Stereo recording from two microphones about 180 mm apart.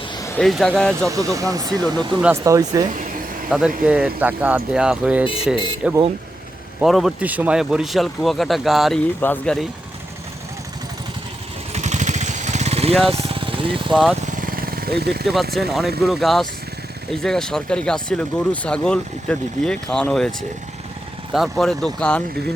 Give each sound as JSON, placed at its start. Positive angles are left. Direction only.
{"t": 0.3, "sound": "speech", "side_deg": 5}
{"t": 1.1, "sound": "speech", "side_deg": -20}
{"t": 3.5, "sound": "speech", "side_deg": -5}
{"t": 9.2, "sound": "speech", "side_deg": 10}
{"t": 11.7, "sound": "vehicle", "side_deg": -40}
{"t": 13.1, "sound": "speech", "side_deg": -30}
{"t": 13.9, "sound": "speech", "side_deg": 0}
{"t": 14.4, "sound": "a sound", "side_deg": -55}
{"t": 15.5, "sound": "speech", "side_deg": 0}
{"t": 21.3, "sound": "speech", "side_deg": 0}